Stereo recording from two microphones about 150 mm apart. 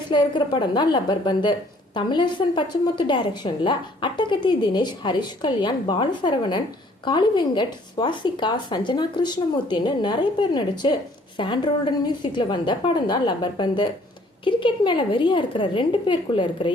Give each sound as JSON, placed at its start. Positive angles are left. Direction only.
{"t": 0.1, "sound": "a woman's voice", "side_deg": 30}